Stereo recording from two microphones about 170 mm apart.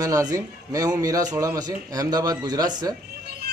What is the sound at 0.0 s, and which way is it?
A man's voice, 20° right (ahead or behind).